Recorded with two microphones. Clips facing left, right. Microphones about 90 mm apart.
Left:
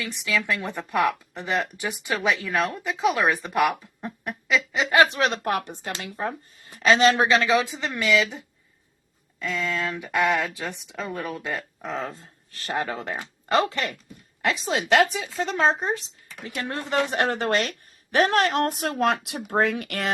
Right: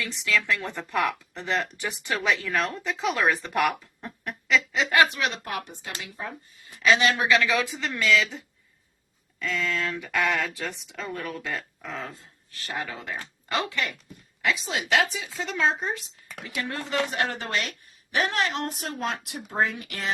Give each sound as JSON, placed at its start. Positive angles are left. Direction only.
{"t": 0.0, "sound": "speech", "side_deg": 15}
{"t": 5.3, "sound": "speech", "side_deg": 55}
{"t": 12.0, "sound": "speech", "side_deg": 40}
{"t": 18.1, "sound": "speech", "side_deg": 55}